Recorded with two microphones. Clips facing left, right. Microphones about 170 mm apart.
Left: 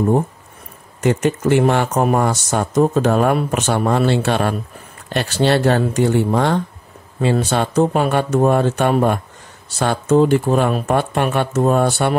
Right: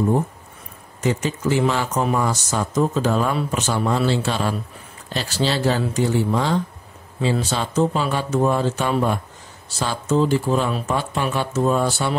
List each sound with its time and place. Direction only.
1.0 s speech: 55° left (ahead or behind)